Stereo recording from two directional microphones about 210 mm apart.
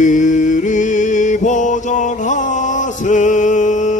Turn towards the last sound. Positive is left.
turn(degrees=35)  # may be behind; listen again after turning